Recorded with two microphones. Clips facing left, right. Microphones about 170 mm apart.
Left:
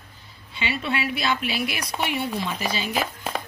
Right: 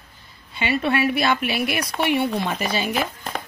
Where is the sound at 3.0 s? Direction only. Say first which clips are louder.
Right 1 dB; centre (ahead or behind).